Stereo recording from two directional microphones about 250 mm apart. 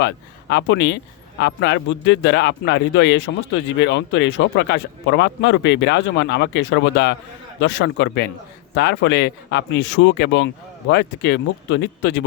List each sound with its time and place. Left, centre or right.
0.0 s speech: left